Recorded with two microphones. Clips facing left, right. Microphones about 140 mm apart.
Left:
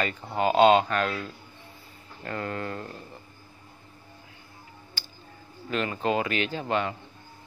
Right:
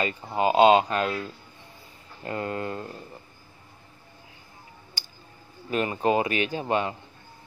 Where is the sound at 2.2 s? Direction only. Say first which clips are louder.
Right 2 dB; 20° right (ahead or behind).